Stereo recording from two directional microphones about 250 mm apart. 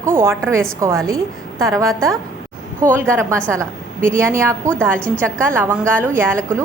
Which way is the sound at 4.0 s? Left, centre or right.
Right.